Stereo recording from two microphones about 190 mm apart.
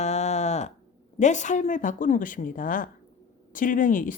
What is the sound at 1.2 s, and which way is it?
A woman's voice, 40° left (ahead or behind).